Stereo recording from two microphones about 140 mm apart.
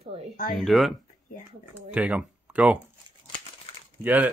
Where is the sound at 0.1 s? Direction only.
45° right (ahead or behind).